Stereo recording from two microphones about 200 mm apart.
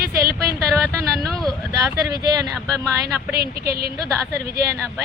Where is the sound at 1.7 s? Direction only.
20° right (ahead or behind).